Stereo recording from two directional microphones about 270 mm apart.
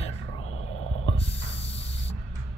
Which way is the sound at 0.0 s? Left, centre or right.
Left.